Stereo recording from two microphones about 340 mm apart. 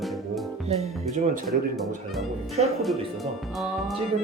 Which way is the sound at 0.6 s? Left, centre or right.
Centre.